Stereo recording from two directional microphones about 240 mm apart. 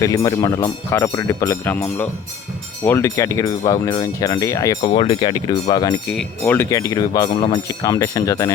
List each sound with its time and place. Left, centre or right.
0.0 s speech: centre